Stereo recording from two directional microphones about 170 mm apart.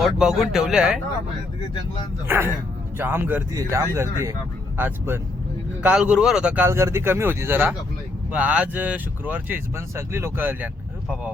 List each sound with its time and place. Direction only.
0.0 s speech: 5° right (ahead or behind)
2.2 s speech: 10° right (ahead or behind)